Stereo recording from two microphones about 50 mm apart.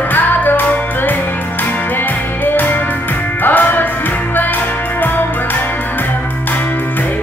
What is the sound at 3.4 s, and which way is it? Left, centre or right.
Music, left.